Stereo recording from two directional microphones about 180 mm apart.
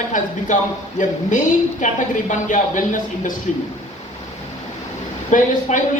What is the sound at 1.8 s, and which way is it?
Speech, 45° left (ahead or behind).